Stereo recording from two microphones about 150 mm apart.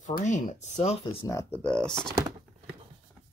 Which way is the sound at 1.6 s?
5° left (ahead or behind).